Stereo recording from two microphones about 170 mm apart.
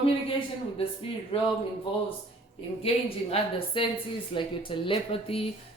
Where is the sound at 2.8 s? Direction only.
35° left (ahead or behind).